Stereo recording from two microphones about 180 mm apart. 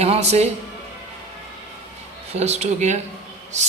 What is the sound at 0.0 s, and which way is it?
Speech, 35° right (ahead or behind).